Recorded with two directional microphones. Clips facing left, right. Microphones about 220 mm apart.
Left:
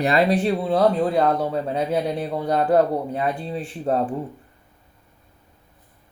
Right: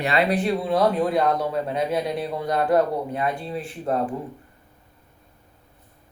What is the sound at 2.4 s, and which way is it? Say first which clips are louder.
Speech: left 2 dB; 30° left (ahead or behind).